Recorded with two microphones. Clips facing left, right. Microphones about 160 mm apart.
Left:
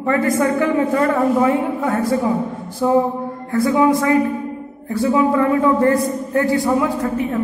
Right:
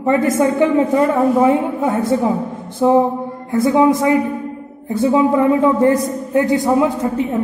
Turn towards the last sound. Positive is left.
turn(degrees=-20)  # may be behind; listen again after turning